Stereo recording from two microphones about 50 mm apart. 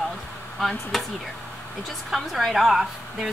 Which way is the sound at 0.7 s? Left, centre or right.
Centre.